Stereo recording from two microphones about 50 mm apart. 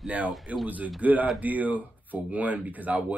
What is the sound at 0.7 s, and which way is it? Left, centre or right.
Speech, right.